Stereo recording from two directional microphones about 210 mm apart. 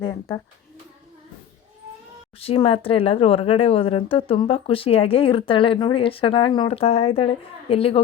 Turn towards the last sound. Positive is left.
turn(degrees=25)  # may be behind; listen again after turning